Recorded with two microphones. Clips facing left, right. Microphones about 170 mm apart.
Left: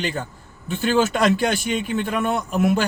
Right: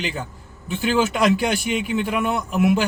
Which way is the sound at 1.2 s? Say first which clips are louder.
Even; 10° right (ahead or behind).